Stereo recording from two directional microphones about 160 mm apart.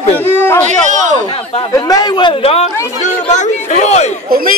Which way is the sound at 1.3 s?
35° left (ahead or behind).